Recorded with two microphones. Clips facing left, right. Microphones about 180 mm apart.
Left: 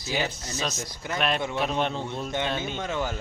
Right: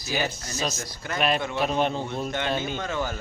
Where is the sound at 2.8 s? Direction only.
20° left (ahead or behind).